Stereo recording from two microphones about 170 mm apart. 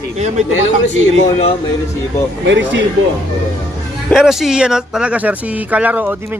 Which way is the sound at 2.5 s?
90° right.